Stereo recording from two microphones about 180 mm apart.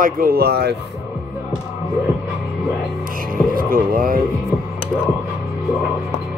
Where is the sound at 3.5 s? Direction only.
50° right (ahead or behind).